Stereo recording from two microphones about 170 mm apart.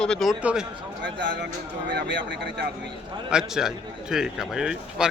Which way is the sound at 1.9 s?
85° right.